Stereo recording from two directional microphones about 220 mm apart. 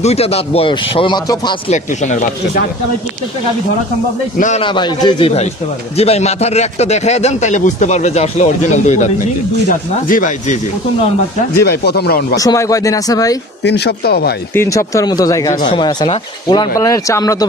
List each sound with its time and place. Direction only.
0.0 s speech: 30° left (ahead or behind)
1.7 s speech: 35° left (ahead or behind)
4.4 s speech: 30° left (ahead or behind)
11.6 s speech: 45° left (ahead or behind)
12.4 s speech: 15° left (ahead or behind)
13.6 s speech: 50° left (ahead or behind)
14.5 s speech: 10° left (ahead or behind)